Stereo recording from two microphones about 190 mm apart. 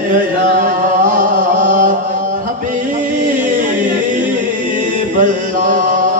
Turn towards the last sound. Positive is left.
turn(degrees=-45)  # may be behind; listen again after turning